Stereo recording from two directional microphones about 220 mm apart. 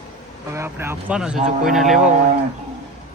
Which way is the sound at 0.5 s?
10° right (ahead or behind).